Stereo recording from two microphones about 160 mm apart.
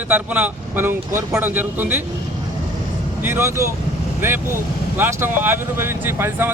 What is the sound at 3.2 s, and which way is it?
Speech, 15° right (ahead or behind).